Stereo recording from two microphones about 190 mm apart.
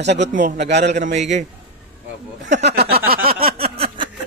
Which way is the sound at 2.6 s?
60° right (ahead or behind).